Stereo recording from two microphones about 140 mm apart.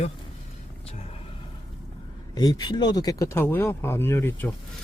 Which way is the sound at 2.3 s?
30° left (ahead or behind).